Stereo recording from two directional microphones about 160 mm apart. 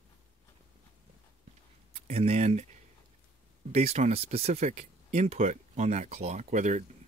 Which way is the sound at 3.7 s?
45° right (ahead or behind).